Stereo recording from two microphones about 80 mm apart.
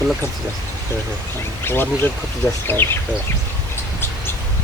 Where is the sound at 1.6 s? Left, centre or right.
Left.